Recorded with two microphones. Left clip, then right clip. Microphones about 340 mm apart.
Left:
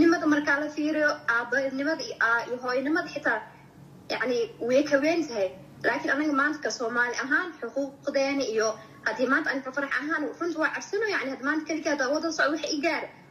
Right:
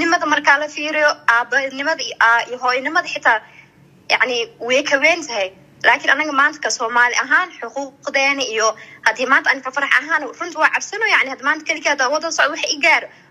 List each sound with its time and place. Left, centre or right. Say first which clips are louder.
0.0 s a sound: right 8 dB; right
0.8 s a woman's voice: right 10 dB; right
12.0 s a woman's voice: right 9 dB; right
12.4 s a woman's voice: right 9 dB; right